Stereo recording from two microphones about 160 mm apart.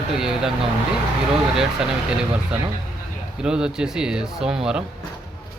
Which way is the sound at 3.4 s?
5° right (ahead or behind).